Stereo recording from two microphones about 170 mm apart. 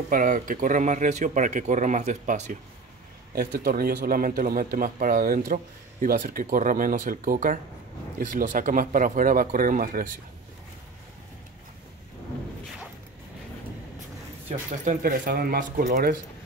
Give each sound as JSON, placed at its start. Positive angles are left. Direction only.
{"t": 0.1, "sound": "speech", "side_deg": -50}
{"t": 3.3, "sound": "a man's voice", "side_deg": -65}
{"t": 14.9, "sound": "a man's voice", "side_deg": -55}